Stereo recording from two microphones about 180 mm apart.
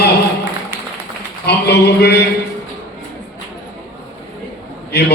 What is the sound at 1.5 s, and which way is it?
Speech, 65° left (ahead or behind).